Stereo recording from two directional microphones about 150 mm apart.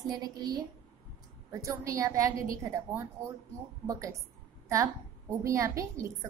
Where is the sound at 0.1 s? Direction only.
25° right (ahead or behind).